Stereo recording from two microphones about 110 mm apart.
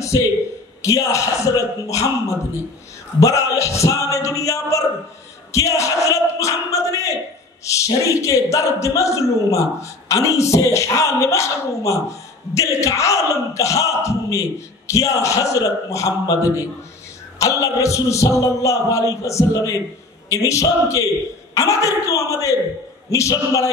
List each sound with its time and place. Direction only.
0.0 s a sound: 30° left (ahead or behind)
0.8 s a man's voice: 30° left (ahead or behind)
17.4 s a man's voice: 30° left (ahead or behind)